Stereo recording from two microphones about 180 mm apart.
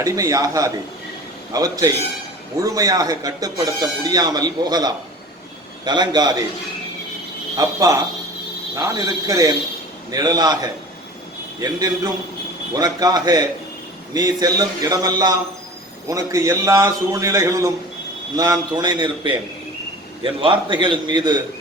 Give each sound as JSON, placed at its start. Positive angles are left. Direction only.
{"t": 0.0, "sound": "speech", "side_deg": -20}
{"t": 7.5, "sound": "a man's voice", "side_deg": -20}
{"t": 20.4, "sound": "speech", "side_deg": -25}